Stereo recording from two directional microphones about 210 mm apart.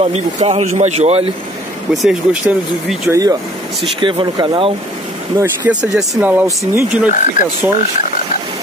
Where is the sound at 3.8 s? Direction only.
25° right (ahead or behind).